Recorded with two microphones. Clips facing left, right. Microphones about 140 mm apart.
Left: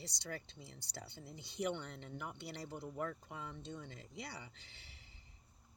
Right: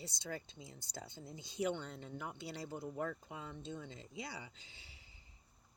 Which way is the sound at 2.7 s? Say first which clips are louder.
Right 1 dB; 50° right (ahead or behind).